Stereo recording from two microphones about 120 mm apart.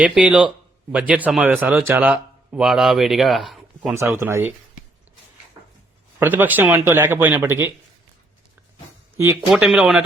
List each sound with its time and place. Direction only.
0.0 s speech: 10° right (ahead or behind)
3.9 s speech: 20° right (ahead or behind)
5.6 s a sound: 30° right (ahead or behind)
6.1 s speech: 15° right (ahead or behind)
9.1 s speech: 20° right (ahead or behind)
9.5 s speech: 5° right (ahead or behind)